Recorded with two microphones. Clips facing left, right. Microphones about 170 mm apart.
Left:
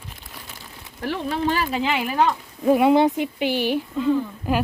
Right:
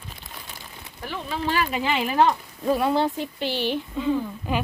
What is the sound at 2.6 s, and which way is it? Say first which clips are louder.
Speech: left 7 dB; 15° left (ahead or behind).